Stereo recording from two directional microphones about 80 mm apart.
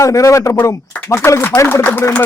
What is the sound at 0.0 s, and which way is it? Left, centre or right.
Speech, left.